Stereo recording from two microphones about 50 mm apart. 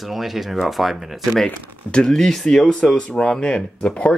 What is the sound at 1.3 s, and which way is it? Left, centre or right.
Speech, centre.